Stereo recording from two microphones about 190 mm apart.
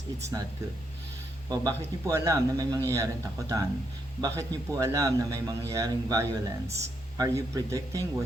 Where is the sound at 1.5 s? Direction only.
15° right (ahead or behind).